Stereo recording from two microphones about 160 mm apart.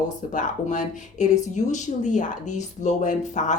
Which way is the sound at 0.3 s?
50° left (ahead or behind).